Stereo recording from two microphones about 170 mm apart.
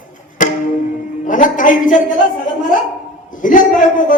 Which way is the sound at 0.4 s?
50° left (ahead or behind).